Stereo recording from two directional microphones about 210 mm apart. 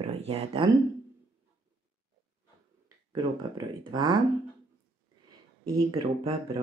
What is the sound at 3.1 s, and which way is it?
Speech, 20° right (ahead or behind).